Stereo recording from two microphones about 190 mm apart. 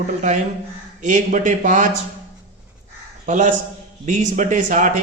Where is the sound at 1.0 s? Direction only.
40° right (ahead or behind).